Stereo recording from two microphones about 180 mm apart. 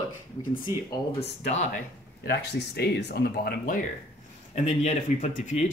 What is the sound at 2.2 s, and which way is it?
Speech, 65° left (ahead or behind).